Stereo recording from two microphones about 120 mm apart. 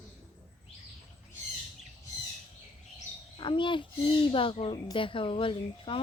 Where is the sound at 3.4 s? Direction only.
45° left (ahead or behind).